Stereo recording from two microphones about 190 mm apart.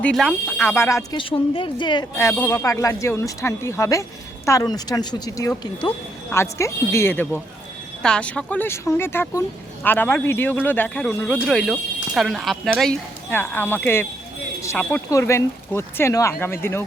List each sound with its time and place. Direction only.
0.0 s speech: 5° left (ahead or behind)
1.2 s speech: 25° left (ahead or behind)